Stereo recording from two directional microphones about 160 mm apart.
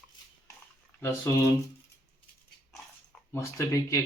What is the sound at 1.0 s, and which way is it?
Speech, 15° left (ahead or behind).